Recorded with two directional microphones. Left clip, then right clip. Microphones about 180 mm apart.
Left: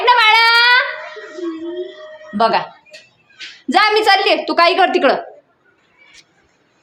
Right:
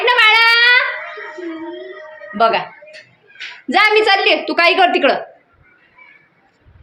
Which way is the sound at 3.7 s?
20° left (ahead or behind).